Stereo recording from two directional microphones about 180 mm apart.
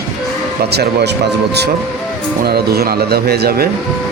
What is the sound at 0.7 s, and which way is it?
Speech, 65° right (ahead or behind).